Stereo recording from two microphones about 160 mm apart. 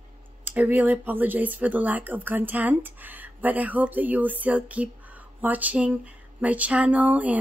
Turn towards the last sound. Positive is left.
turn(degrees=-10)  # may be behind; listen again after turning